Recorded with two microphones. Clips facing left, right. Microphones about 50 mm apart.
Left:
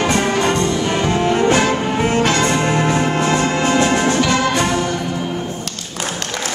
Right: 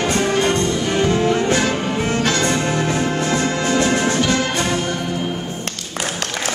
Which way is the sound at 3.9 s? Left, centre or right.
Left.